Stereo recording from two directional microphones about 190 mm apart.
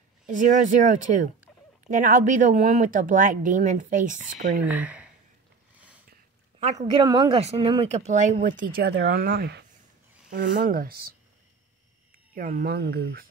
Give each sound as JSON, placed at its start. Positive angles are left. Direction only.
{"t": 0.3, "sound": "speech", "side_deg": -45}
{"t": 4.6, "sound": "speech", "side_deg": -10}
{"t": 6.6, "sound": "speech", "side_deg": -35}
{"t": 10.3, "sound": "speech", "side_deg": -45}
{"t": 12.4, "sound": "speech", "side_deg": -45}